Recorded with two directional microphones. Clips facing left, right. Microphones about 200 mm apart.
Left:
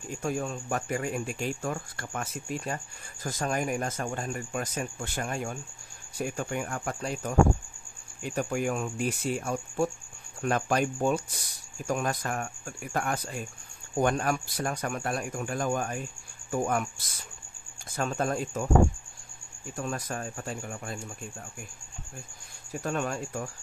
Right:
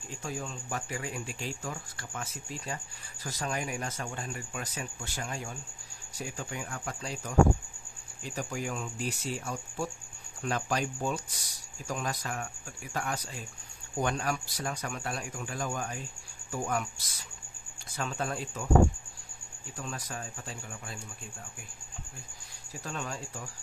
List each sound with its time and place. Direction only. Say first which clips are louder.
0.1 s a man's voice: left 7 dB; 55° left (ahead or behind)
19.8 s a man's voice: left 6 dB; 50° left (ahead or behind)
22.7 s speech: left 7 dB; 55° left (ahead or behind)